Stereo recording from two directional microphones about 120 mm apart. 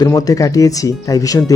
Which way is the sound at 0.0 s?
30° left (ahead or behind).